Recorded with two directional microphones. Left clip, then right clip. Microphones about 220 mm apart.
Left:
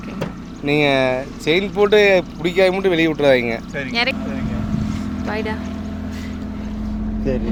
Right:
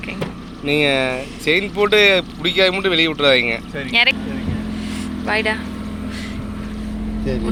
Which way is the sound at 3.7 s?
Centre (ahead or behind).